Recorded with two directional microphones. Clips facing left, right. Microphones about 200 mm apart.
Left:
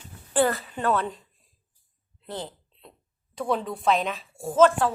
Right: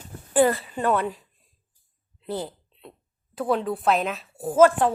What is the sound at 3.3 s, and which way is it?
Speech, 5° right (ahead or behind).